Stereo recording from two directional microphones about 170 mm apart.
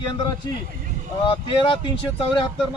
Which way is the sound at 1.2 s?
30° left (ahead or behind).